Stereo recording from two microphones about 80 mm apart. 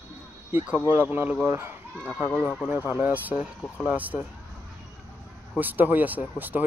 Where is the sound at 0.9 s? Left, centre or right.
Right.